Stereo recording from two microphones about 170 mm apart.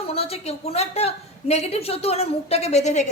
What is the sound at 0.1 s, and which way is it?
A woman's voice, 35° left (ahead or behind).